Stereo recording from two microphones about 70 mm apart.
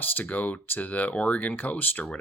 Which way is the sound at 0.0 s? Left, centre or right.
Left.